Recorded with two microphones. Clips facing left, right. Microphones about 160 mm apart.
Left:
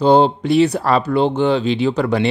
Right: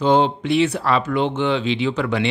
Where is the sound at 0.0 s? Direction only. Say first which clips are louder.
Left 4 dB; 35° left (ahead or behind).